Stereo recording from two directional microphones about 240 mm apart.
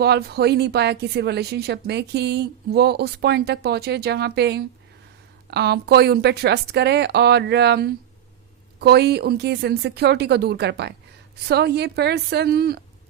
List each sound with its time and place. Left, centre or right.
0.0 s a woman's voice: right